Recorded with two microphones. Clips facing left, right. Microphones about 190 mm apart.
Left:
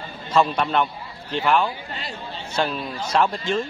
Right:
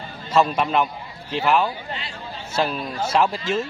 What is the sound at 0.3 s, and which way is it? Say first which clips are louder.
Speech: right 1 dB; 5° right (ahead or behind).